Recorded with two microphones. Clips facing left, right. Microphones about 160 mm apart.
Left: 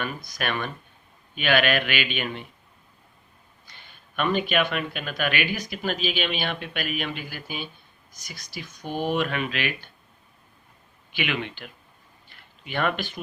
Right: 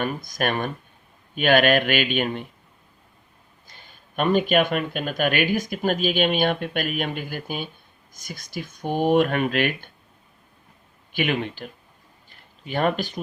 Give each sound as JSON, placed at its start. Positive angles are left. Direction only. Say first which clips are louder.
{"t": 0.0, "sound": "speech", "louder": "right 5 dB", "side_deg": -45}
{"t": 3.7, "sound": "speech", "louder": "right 2 dB", "side_deg": -40}
{"t": 11.1, "sound": "speech", "louder": "right 5 dB", "side_deg": -45}
{"t": 12.3, "sound": "a sound", "louder": "right 4 dB", "side_deg": -40}